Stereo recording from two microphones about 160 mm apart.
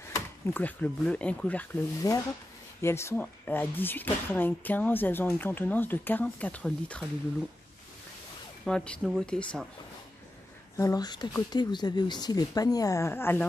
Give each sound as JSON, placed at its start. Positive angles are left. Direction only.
{"t": 0.1, "sound": "speech", "side_deg": 10}
{"t": 2.0, "sound": "speech", "side_deg": 20}
{"t": 8.6, "sound": "speech", "side_deg": 5}
{"t": 10.8, "sound": "speech", "side_deg": 20}